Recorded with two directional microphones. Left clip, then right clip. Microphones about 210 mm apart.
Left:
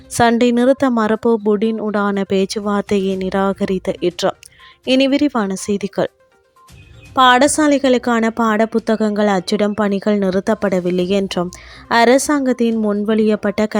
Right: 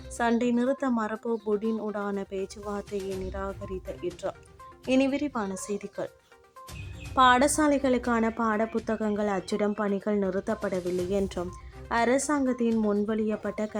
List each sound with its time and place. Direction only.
0.1 s a woman's voice: 40° left (ahead or behind)
7.2 s a woman's voice: 35° left (ahead or behind)